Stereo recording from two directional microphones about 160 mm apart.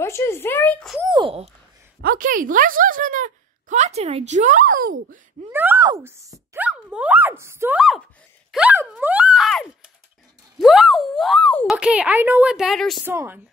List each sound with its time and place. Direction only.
0.0 s speech: 15° left (ahead or behind)
1.0 s speech: 30° right (ahead or behind)
2.0 s speech: 65° right (ahead or behind)
5.5 s a woman's voice: 10° right (ahead or behind)
6.5 s speech: 10° right (ahead or behind)
8.5 s a sound: 10° right (ahead or behind)
10.6 s speech: centre (ahead or behind)
11.7 s a woman's voice: 10° right (ahead or behind)
13.0 s a woman's voice: 15° right (ahead or behind)